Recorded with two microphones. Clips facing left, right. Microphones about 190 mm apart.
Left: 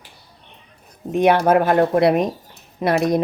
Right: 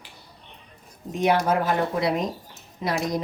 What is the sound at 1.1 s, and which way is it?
Speech, 60° left (ahead or behind).